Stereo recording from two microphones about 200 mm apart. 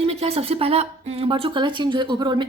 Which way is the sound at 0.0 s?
30° right (ahead or behind).